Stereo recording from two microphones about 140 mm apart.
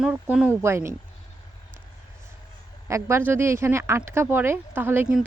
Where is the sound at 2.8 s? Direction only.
20° right (ahead or behind).